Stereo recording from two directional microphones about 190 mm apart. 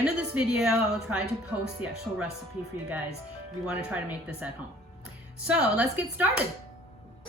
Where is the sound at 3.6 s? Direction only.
5° right (ahead or behind).